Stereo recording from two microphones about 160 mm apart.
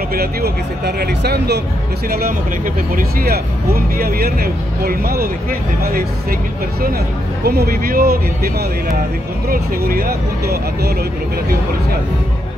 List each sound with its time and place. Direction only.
0.1 s speech: 75° right (ahead or behind)
2.0 s speech: 70° right (ahead or behind)
7.4 s speech: 80° right
9.5 s speech: 70° right (ahead or behind)